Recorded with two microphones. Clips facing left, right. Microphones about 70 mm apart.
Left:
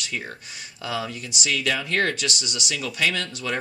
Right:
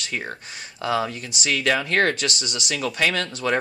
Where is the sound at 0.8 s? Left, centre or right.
Right.